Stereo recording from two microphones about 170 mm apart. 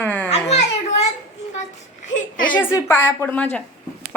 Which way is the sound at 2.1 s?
55° left (ahead or behind).